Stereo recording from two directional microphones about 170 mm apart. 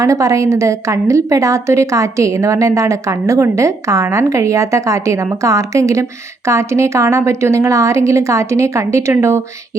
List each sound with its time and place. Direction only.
0.0 s a woman's voice: 20° right (ahead or behind)